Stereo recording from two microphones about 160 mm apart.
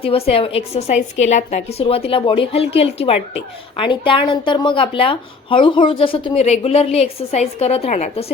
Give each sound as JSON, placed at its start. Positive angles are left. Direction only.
{"t": 0.0, "sound": "a woman's voice", "side_deg": 40}